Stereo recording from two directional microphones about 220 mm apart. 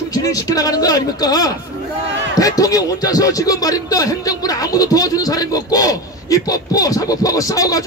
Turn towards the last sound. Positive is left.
turn(degrees=15)  # may be behind; listen again after turning